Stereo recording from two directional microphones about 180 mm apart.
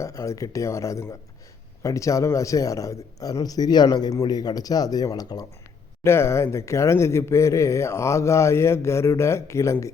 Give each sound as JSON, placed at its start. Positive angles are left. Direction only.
{"t": 0.0, "sound": "a man's voice", "side_deg": 15}